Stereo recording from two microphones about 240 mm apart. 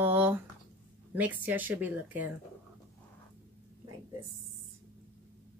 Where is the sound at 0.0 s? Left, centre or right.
Centre.